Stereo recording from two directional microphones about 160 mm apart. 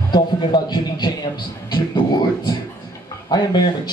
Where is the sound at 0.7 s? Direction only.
25° left (ahead or behind).